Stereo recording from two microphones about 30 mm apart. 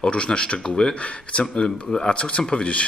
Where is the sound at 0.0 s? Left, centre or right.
Left.